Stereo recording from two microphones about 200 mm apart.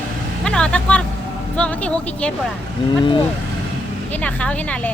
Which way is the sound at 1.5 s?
5° left (ahead or behind).